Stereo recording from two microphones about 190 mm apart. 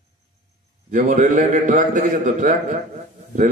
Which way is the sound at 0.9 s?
45° right (ahead or behind).